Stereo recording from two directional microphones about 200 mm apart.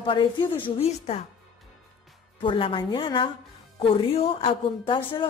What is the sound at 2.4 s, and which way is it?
A woman's voice, 25° left (ahead or behind).